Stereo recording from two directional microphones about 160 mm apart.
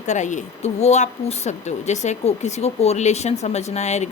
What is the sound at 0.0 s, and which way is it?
Speech, 50° left (ahead or behind).